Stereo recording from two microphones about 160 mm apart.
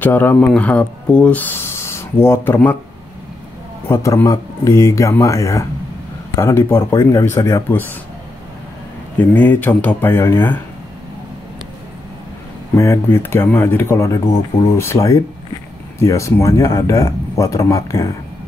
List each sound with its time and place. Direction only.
0.0 s speech: 10° left (ahead or behind)
3.9 s speech: 15° left (ahead or behind)
9.2 s speech: 10° left (ahead or behind)
12.7 s speech: 20° left (ahead or behind)